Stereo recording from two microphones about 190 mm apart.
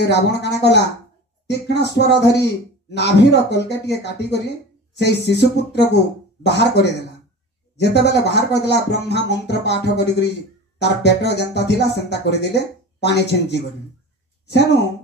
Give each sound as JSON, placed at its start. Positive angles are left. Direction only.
{"t": 0.0, "sound": "speech", "side_deg": 65}